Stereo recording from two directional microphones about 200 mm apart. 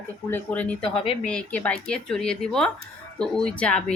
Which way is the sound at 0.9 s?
30° left (ahead or behind).